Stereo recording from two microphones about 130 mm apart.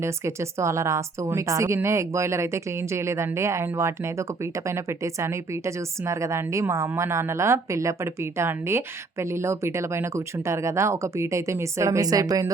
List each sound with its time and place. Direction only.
0.0 s a woman's voice: 20° right (ahead or behind)